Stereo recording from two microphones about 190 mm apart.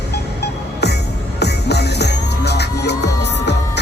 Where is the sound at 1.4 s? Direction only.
60° left (ahead or behind).